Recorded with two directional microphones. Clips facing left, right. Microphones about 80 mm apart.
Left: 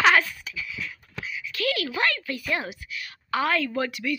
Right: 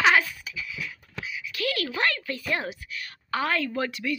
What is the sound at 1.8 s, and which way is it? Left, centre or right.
A woman's voice, right.